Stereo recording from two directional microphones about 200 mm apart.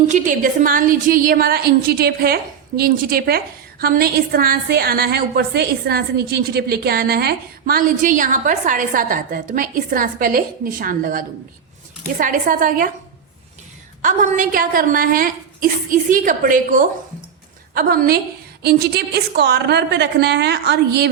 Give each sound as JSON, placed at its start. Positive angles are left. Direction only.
{"t": 0.1, "sound": "a woman's voice", "side_deg": -40}
{"t": 14.0, "sound": "a woman's voice", "side_deg": -40}